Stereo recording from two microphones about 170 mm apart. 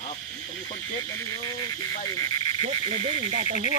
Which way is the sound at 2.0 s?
20° left (ahead or behind).